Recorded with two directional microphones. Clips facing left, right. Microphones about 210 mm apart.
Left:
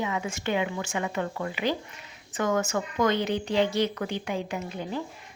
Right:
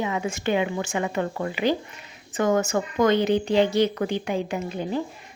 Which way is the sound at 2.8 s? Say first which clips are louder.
Right 5 dB; 25° right (ahead or behind).